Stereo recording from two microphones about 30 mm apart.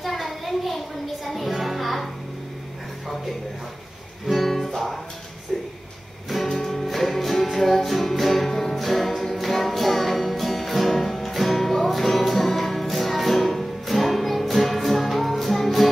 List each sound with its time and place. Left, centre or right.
0.0 s music: centre
4.3 s music: centre
5.5 s a sound: centre
6.3 s music: centre